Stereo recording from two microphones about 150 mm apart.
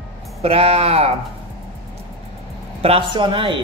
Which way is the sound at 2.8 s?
40° right (ahead or behind).